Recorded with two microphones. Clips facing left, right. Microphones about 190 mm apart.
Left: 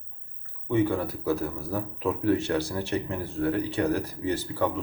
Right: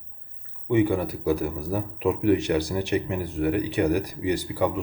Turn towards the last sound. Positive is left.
turn(degrees=-15)  # may be behind; listen again after turning